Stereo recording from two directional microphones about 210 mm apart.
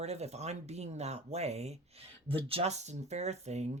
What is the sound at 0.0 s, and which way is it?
Speech, 30° right (ahead or behind).